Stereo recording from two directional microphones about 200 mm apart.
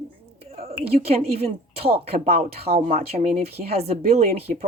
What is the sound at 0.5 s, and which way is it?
Speech, 30° right (ahead or behind).